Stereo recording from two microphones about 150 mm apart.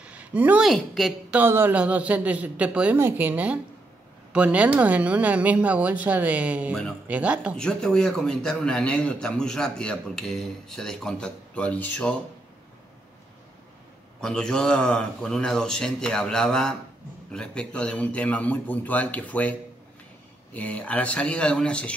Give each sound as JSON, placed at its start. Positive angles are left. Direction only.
{"t": 0.0, "sound": "a sound", "side_deg": -10}
{"t": 0.7, "sound": "a man's voice", "side_deg": 0}
{"t": 1.4, "sound": "speech", "side_deg": -15}
{"t": 7.5, "sound": "a man's voice", "side_deg": 5}
{"t": 14.2, "sound": "a man's voice", "side_deg": 5}
{"t": 20.5, "sound": "a man's voice", "side_deg": 10}